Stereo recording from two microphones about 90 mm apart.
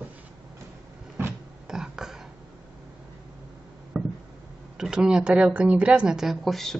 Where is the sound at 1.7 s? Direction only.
5° right (ahead or behind).